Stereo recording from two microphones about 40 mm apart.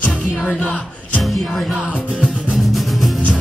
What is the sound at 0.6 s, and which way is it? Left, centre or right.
Music, left.